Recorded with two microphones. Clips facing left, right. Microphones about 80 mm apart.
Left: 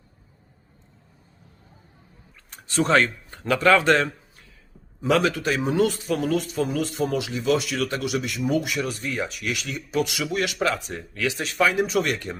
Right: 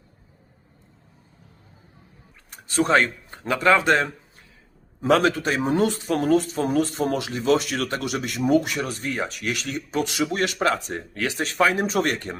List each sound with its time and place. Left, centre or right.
2.8 s a man's voice: right
4.9 s speech: right